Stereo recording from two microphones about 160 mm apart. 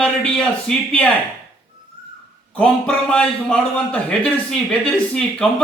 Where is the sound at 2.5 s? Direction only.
5° left (ahead or behind).